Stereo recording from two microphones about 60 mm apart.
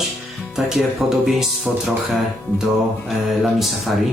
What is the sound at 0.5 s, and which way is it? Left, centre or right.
Speech, centre.